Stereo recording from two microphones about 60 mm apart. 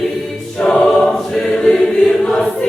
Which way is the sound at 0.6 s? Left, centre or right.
Centre.